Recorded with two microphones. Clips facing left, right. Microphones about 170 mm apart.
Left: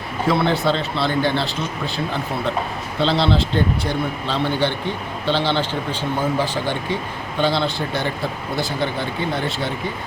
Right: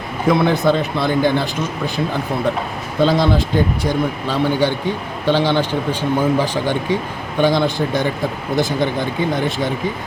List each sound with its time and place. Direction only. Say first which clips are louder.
0.3 s speech: right 4 dB; 15° right (ahead or behind)
3.2 s speech: right 3 dB; 15° right (ahead or behind)